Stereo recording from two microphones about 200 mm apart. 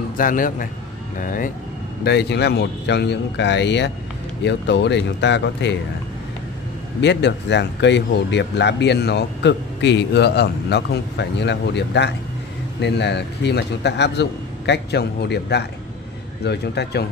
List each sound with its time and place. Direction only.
0.2 s a man's voice: 45° left (ahead or behind)
2.0 s speech: 55° left (ahead or behind)
7.0 s speech: 60° left (ahead or behind)